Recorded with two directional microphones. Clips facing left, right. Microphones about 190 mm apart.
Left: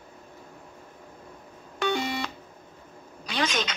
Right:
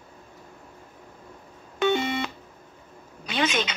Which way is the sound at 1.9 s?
20° right (ahead or behind).